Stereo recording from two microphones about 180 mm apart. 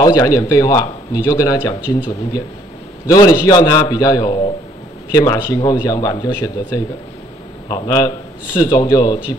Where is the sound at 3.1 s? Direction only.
20° left (ahead or behind).